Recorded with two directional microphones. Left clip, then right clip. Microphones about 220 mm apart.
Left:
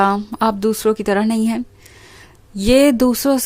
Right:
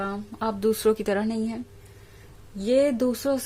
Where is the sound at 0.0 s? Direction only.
35° left (ahead or behind).